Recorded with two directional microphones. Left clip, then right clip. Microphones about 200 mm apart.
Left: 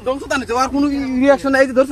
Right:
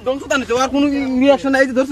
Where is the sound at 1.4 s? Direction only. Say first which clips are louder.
Left 1 dB; 55° right (ahead or behind).